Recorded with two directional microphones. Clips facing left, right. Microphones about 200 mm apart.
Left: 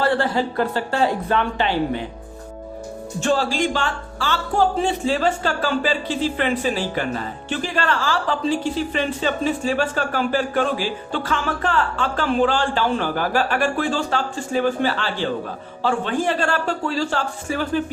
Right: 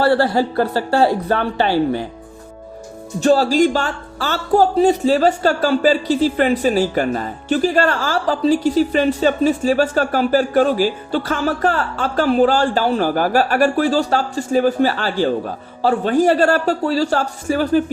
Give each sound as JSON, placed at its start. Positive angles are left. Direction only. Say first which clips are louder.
{"t": 0.0, "sound": "speech", "louder": "right 5 dB", "side_deg": -40}
{"t": 3.2, "sound": "speech", "louder": "right 7 dB", "side_deg": -40}